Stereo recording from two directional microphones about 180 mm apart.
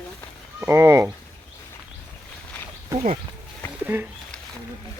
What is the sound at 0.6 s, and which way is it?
Speech, 15° right (ahead or behind).